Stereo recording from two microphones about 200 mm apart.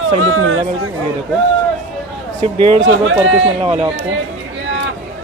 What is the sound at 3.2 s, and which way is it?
Speech, 30° right (ahead or behind).